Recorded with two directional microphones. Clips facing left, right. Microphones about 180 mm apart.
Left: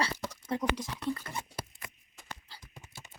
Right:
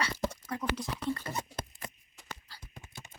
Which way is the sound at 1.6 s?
10° left (ahead or behind).